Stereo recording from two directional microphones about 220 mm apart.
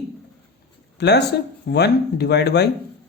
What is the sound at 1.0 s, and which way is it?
Speech, 50° left (ahead or behind).